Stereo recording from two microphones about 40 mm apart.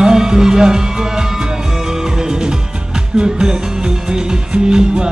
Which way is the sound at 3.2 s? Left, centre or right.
Centre.